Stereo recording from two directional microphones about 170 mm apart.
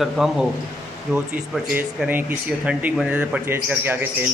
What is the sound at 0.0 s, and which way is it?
Speech, centre (ahead or behind).